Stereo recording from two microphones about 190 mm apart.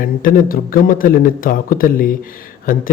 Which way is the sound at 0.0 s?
45° left (ahead or behind).